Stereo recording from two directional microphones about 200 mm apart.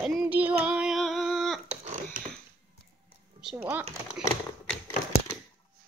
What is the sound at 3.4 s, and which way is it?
Speech, 5° right (ahead or behind).